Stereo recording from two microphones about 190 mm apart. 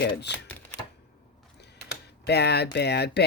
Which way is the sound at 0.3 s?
10° left (ahead or behind).